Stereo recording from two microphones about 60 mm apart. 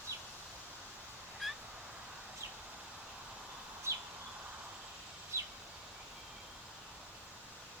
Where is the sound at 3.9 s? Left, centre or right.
Right.